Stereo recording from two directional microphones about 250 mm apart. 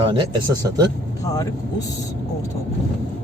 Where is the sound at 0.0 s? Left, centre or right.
Centre.